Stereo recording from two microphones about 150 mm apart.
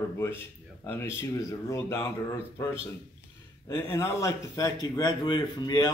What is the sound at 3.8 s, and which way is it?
Speech, 15° left (ahead or behind).